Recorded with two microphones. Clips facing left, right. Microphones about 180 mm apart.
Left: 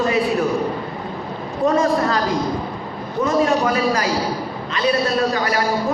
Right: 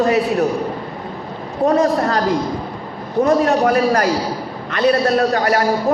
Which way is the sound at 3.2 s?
60° right (ahead or behind).